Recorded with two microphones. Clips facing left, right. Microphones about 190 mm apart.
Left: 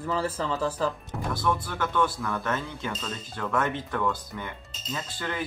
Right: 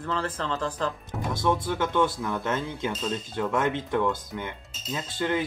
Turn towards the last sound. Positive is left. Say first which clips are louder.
# right 6 dB
turn(degrees=-20)  # may be behind; listen again after turning